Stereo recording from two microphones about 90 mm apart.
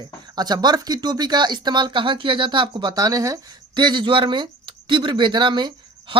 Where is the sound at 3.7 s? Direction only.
60° right (ahead or behind).